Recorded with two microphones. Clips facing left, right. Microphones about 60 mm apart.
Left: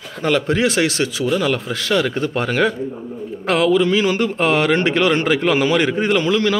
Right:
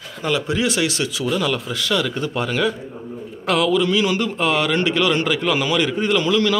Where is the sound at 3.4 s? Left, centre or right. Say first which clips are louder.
Left 2 dB; left.